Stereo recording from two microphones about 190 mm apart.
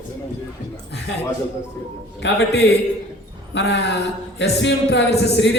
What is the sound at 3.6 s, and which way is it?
A man's voice, 65° left (ahead or behind).